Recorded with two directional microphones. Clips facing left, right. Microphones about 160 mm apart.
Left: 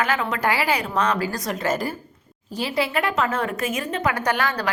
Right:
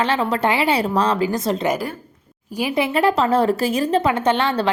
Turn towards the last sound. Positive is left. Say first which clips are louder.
# right 5 dB
turn(degrees=-25)  # may be behind; listen again after turning